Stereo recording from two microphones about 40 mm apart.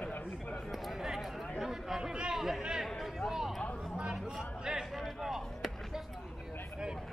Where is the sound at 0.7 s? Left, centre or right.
Centre.